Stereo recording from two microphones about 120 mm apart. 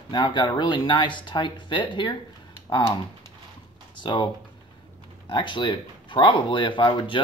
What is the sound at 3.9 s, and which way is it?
Speech, 40° left (ahead or behind).